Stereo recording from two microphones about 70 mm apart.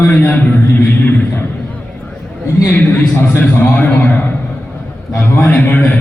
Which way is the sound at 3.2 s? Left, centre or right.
Left.